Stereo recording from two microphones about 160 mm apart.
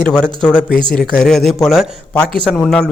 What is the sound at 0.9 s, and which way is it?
A man's voice, 5° left (ahead or behind).